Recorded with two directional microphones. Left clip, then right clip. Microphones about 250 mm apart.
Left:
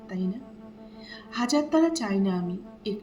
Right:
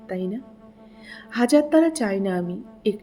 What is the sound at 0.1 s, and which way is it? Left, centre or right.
A woman's voice, right.